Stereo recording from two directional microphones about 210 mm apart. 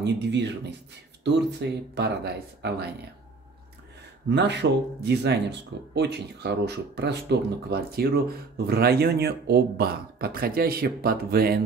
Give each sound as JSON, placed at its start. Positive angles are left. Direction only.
{"t": 0.0, "sound": "speech", "side_deg": -55}
{"t": 4.3, "sound": "speech", "side_deg": -55}